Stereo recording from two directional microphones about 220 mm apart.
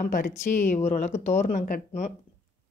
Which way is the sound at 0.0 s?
35° left (ahead or behind).